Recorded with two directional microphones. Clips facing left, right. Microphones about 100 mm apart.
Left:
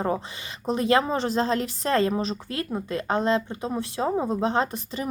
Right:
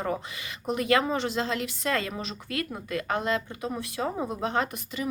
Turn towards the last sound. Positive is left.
turn(degrees=30)  # may be behind; listen again after turning